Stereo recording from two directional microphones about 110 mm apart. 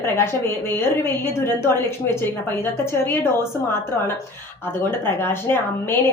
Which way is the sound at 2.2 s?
20° left (ahead or behind).